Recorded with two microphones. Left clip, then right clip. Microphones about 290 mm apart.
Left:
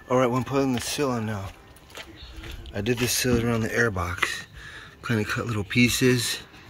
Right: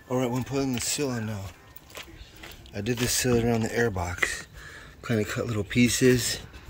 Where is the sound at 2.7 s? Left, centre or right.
Centre.